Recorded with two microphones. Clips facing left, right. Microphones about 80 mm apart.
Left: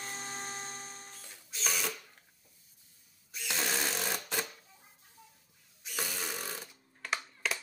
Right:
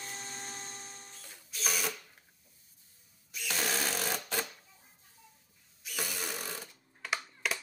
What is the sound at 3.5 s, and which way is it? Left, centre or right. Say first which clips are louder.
Sewing machine: even; centre.